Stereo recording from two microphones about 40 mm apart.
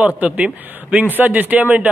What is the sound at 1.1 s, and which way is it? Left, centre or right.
Speech, right.